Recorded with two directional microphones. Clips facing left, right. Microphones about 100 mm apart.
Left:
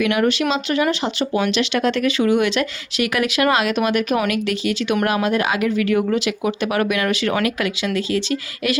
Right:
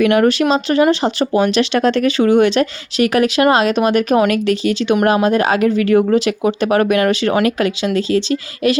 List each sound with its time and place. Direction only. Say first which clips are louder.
0.0 s speech: right 6 dB; 45° right (ahead or behind)